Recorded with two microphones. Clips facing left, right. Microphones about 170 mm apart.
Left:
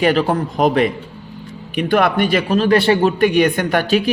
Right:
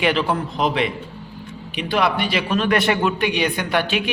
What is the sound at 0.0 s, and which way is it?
A man's voice, 40° left (ahead or behind).